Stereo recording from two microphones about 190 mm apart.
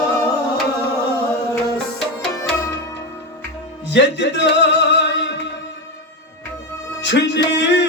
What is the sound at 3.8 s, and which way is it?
Music, 70° left (ahead or behind).